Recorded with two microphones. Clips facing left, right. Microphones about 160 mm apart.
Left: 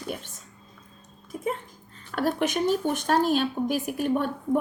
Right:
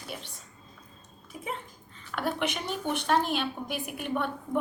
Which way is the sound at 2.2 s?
40° left (ahead or behind).